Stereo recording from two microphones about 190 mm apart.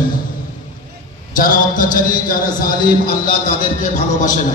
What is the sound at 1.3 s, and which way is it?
A man's voice, 45° left (ahead or behind).